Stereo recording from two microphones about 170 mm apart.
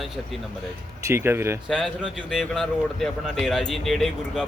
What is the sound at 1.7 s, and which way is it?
Speech, centre (ahead or behind).